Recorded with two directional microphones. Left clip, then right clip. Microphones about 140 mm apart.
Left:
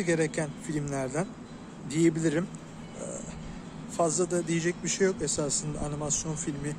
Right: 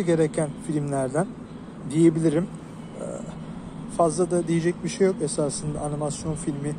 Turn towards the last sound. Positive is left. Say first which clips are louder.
# right 5 dB
turn(degrees=10)  # may be behind; listen again after turning